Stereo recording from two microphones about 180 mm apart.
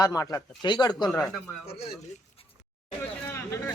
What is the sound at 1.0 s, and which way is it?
Speech, 5° left (ahead or behind).